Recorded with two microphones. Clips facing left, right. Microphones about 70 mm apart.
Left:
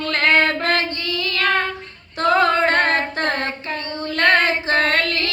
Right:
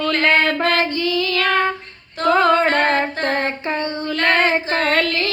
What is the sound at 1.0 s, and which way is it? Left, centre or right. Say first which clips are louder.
Child singing: right 6 dB; right.